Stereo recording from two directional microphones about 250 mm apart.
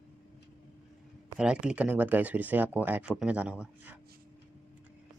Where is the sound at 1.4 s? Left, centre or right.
Centre.